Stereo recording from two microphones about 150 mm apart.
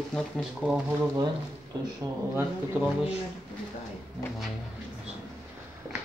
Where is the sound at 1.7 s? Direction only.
25° right (ahead or behind).